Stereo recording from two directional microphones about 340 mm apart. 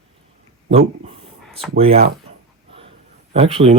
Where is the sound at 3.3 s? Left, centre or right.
Centre.